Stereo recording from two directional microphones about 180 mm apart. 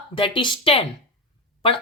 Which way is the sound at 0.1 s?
30° left (ahead or behind).